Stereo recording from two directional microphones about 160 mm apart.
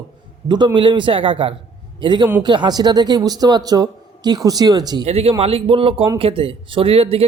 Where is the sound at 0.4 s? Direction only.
30° right (ahead or behind).